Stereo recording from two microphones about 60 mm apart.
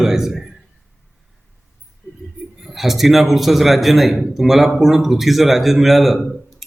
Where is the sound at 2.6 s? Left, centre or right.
Centre.